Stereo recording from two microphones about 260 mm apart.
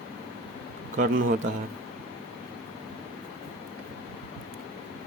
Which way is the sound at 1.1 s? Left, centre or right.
Right.